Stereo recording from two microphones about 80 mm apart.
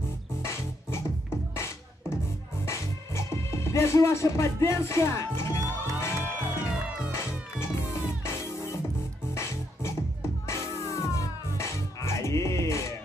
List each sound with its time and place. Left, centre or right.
0.4 s music: left
2.6 s music: left
10.5 s music: left